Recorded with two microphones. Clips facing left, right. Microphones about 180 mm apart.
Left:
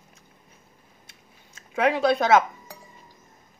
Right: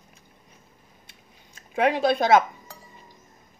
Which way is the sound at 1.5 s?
35° right (ahead or behind).